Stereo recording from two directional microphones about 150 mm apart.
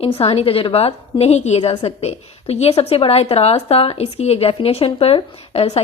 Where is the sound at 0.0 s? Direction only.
40° left (ahead or behind).